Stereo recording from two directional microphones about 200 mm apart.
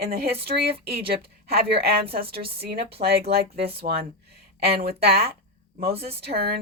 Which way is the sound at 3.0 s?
40° right (ahead or behind).